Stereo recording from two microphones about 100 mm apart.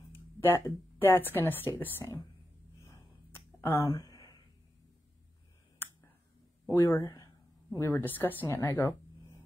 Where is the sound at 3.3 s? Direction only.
25° left (ahead or behind).